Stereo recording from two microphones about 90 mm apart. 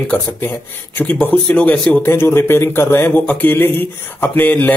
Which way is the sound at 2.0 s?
25° left (ahead or behind).